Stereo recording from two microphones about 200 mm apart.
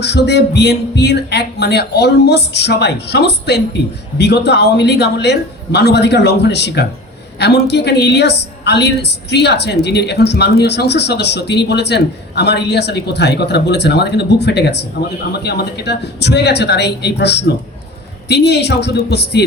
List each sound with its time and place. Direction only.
0.0 s a woman's voice: 55° left (ahead or behind)